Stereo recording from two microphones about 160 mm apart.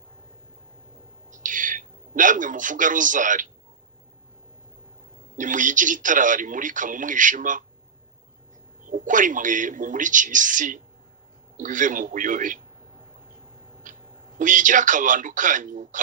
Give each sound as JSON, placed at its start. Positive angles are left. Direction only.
{"t": 1.3, "sound": "bird", "side_deg": -55}
{"t": 5.4, "sound": "speech", "side_deg": -55}
{"t": 8.9, "sound": "speech", "side_deg": -55}
{"t": 13.9, "sound": "a sound", "side_deg": -55}
{"t": 14.3, "sound": "speech", "side_deg": -55}